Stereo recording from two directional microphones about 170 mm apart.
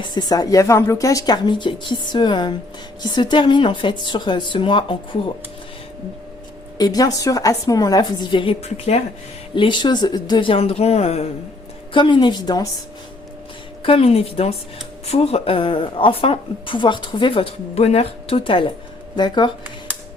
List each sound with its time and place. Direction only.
0.1 s speech: 25° left (ahead or behind)
6.7 s speech: 20° left (ahead or behind)
13.8 s speech: 35° left (ahead or behind)